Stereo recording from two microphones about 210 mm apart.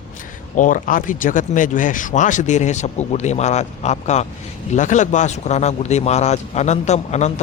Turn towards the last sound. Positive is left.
turn(degrees=30)  # may be behind; listen again after turning